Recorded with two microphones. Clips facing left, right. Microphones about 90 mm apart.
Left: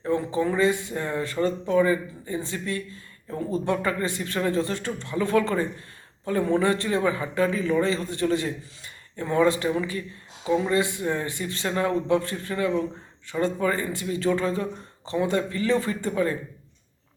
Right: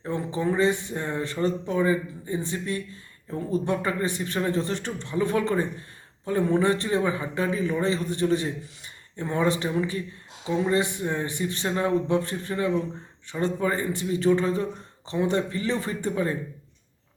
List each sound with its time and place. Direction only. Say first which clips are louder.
0.0 s a man's voice: left 3 dB; 20° right (ahead or behind)